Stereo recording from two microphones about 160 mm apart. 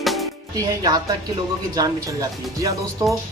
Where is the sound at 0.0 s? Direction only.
Centre (ahead or behind).